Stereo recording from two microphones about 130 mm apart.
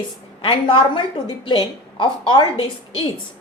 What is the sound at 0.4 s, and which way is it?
A woman's voice, 40° left (ahead or behind).